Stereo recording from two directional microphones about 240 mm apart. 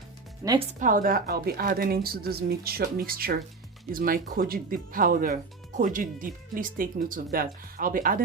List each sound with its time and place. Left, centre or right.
0.4 s speech: right